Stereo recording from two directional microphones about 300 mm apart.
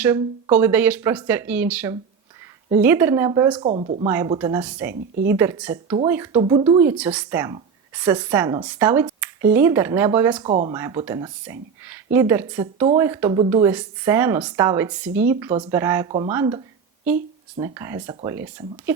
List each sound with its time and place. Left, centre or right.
0.0 s speech: centre
4.0 s speech: centre
10.4 s speech: centre